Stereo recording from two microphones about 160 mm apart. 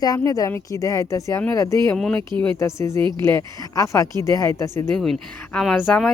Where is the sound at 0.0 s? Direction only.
20° left (ahead or behind).